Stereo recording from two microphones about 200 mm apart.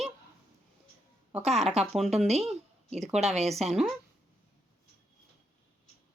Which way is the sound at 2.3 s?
30° right (ahead or behind).